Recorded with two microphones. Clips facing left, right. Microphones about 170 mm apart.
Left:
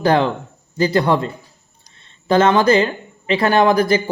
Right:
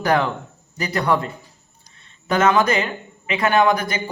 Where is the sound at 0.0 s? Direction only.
30° left (ahead or behind).